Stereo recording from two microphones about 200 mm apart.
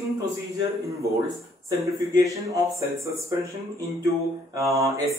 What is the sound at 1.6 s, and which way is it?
A man's voice, 15° right (ahead or behind).